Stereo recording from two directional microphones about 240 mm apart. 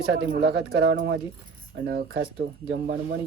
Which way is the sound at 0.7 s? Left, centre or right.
Right.